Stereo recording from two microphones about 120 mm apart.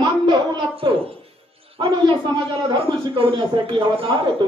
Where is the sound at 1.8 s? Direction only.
40° right (ahead or behind).